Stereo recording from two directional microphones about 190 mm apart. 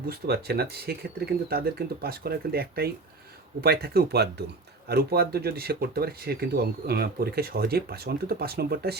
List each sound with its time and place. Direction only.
0.1 s speech: 55° right (ahead or behind)